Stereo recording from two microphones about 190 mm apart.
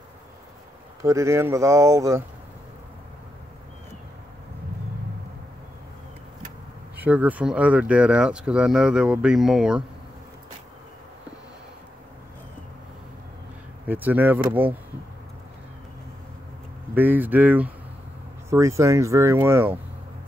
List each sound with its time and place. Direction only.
1.0 s speech: 15° right (ahead or behind)
7.0 s speech: 10° right (ahead or behind)
13.8 s speech: 10° right (ahead or behind)
16.9 s speech: 10° right (ahead or behind)